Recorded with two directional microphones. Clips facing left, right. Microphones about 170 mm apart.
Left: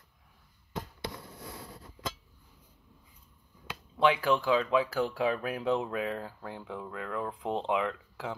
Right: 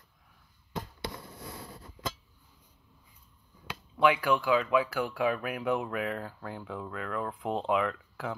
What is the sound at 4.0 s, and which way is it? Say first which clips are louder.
Speech: even; 30° left (ahead or behind).